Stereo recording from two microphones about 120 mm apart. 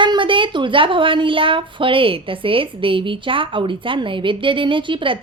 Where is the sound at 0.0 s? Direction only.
40° right (ahead or behind).